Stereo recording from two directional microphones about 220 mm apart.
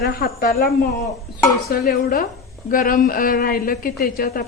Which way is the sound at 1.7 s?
40° left (ahead or behind).